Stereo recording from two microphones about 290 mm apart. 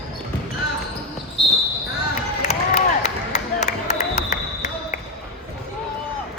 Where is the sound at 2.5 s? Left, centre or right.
Left.